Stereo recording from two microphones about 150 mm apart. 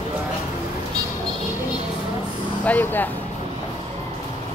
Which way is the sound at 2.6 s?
10° left (ahead or behind).